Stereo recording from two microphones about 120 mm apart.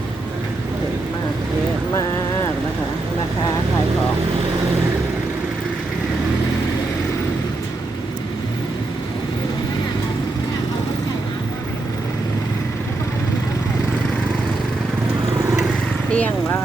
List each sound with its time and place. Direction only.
16.1 s vehicle: 15° left (ahead or behind)